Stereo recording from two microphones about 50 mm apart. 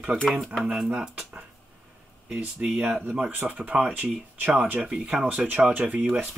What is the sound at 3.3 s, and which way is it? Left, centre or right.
Speech, right.